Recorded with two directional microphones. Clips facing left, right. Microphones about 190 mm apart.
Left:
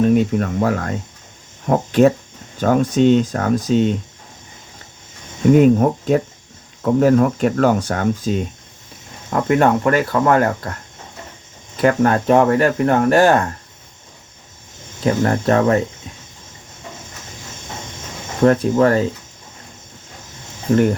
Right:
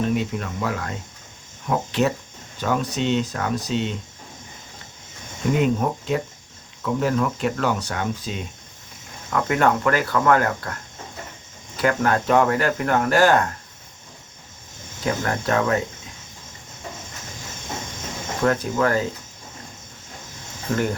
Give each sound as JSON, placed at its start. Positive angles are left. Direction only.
{"t": 0.1, "sound": "speech", "side_deg": 45}
{"t": 5.5, "sound": "speech", "side_deg": 45}
{"t": 9.3, "sound": "speech", "side_deg": 25}
{"t": 11.8, "sound": "speech", "side_deg": 25}
{"t": 15.0, "sound": "speech", "side_deg": 30}
{"t": 18.4, "sound": "speech", "side_deg": 30}